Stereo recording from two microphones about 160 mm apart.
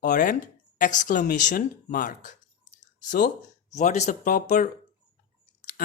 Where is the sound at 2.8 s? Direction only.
55° left (ahead or behind).